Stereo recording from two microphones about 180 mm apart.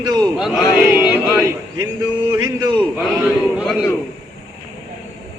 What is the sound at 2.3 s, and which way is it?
Speech, 25° right (ahead or behind).